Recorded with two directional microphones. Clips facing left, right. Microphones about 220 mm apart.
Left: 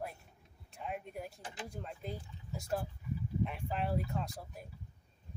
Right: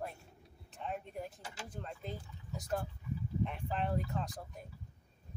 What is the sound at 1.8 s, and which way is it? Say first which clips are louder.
Speech: right 2 dB; 5° left (ahead or behind).